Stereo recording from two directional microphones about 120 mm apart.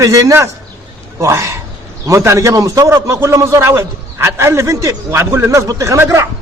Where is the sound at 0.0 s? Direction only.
30° right (ahead or behind).